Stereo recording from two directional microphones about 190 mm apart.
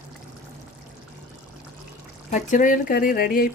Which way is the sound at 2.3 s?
40° left (ahead or behind).